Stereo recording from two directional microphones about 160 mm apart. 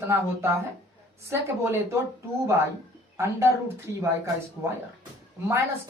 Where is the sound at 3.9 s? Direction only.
20° right (ahead or behind).